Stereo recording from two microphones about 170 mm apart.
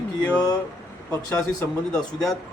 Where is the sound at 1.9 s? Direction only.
Centre (ahead or behind).